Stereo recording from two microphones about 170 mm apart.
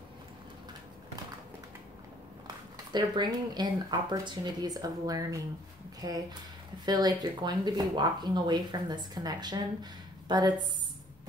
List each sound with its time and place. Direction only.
2.4 s a woman's voice: 25° right (ahead or behind)